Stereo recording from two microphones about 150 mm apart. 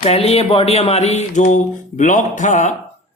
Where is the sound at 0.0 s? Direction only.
40° left (ahead or behind).